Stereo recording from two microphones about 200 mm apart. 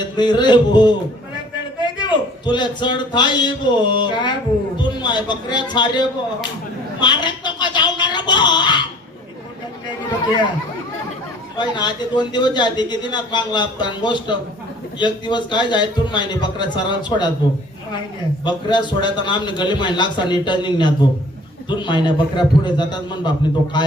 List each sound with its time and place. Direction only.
0.2 s a man's voice: 20° left (ahead or behind)
7.0 s a sound: 20° left (ahead or behind)
11.5 s a man's voice: 20° left (ahead or behind)
18.4 s a man's voice: 20° left (ahead or behind)